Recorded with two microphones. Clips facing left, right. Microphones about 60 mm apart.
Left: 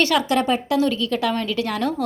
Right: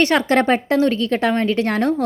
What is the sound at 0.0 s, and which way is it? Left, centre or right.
Speech, right.